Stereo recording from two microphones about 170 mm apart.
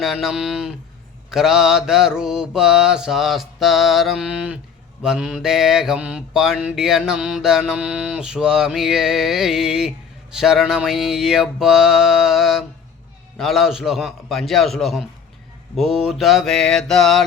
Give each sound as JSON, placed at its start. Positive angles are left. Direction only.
{"t": 0.0, "sound": "mantra", "side_deg": 0}